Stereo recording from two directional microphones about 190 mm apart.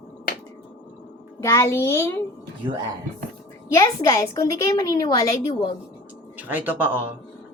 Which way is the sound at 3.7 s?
15° left (ahead or behind).